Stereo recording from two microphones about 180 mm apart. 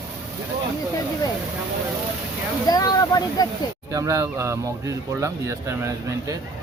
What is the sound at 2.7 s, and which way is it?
Speech, 20° left (ahead or behind).